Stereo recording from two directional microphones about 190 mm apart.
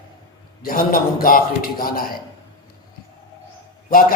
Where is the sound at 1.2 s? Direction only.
50° left (ahead or behind).